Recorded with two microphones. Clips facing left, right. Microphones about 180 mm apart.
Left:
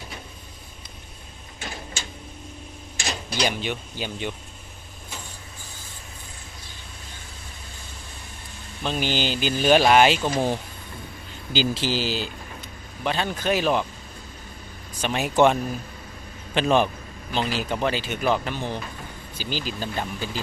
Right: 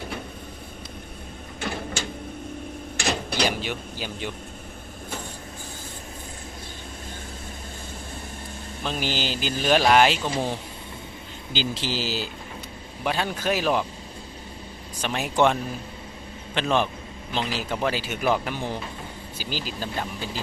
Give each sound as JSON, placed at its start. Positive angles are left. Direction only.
{"t": 1.6, "sound": "a sound", "side_deg": -55}
{"t": 3.0, "sound": "mechanisms", "side_deg": -60}
{"t": 3.4, "sound": "a man's voice", "side_deg": -5}
{"t": 8.8, "sound": "a man's voice", "side_deg": 0}
{"t": 11.5, "sound": "a man's voice", "side_deg": 5}
{"t": 15.0, "sound": "a man's voice", "side_deg": 0}